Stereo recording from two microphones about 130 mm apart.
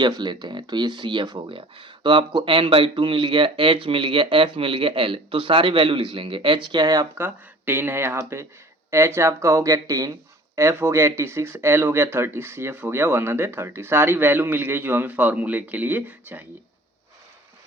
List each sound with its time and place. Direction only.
0.0 s speech: 35° right (ahead or behind); by 16.5 s 15° right (ahead or behind)